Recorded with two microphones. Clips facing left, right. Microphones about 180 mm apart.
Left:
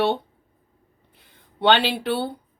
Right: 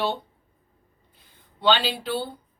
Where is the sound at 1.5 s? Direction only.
65° left (ahead or behind).